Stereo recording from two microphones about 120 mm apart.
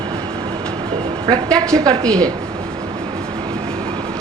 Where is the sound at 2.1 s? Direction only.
10° left (ahead or behind).